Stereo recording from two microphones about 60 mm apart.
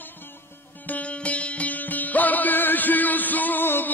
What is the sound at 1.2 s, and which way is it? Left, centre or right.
Music, left.